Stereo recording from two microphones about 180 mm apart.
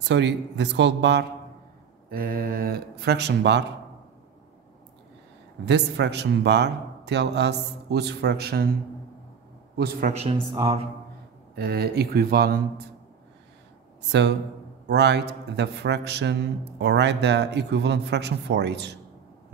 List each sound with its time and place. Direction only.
0.1 s a man's voice: 75° right (ahead or behind)
2.0 s speech: 55° right (ahead or behind); by 3.6 s 70° right (ahead or behind)
5.7 s a man's voice: 75° right (ahead or behind)
9.8 s speech: 55° right (ahead or behind)
10.1 s speech: 35° right (ahead or behind)
11.5 s speech: 65° right (ahead or behind)
14.9 s a man's voice: 70° right (ahead or behind)